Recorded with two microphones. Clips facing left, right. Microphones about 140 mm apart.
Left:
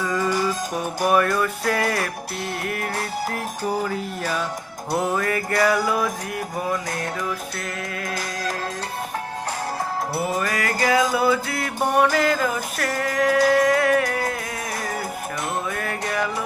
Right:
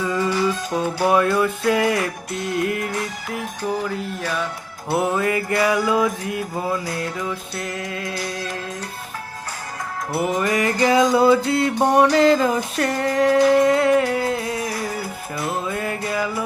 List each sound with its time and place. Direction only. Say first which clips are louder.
0.7 s music: right 4 dB; 15° left (ahead or behind)
1.0 s music: right 2 dB; 20° right (ahead or behind)
3.6 s music: even; 10° left (ahead or behind)
4.9 s music: right 3 dB; 10° right (ahead or behind)
10.3 s music: right 4 dB; 20° right (ahead or behind)
15.7 s music: right 2 dB; 25° right (ahead or behind)